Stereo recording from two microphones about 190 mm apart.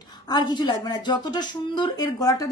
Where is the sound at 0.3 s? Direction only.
20° left (ahead or behind).